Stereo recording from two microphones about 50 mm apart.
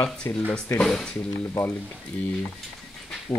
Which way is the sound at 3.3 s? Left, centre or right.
Left.